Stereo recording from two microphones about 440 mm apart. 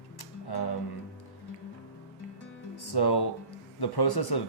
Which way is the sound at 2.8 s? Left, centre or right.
Left.